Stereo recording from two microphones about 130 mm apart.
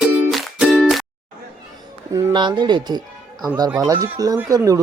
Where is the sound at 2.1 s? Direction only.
35° right (ahead or behind).